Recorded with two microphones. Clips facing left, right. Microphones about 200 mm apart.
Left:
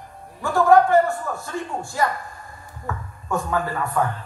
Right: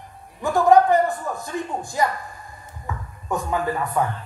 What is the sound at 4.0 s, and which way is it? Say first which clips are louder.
Speech: left 1 dB; 15° right (ahead or behind).